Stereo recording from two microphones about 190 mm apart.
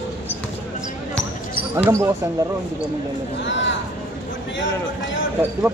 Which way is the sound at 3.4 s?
75° left (ahead or behind).